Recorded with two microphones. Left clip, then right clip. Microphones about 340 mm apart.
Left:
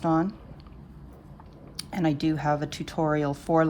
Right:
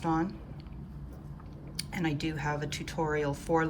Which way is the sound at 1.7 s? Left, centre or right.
Centre.